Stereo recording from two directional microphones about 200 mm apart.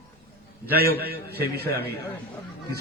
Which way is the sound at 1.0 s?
50° right (ahead or behind).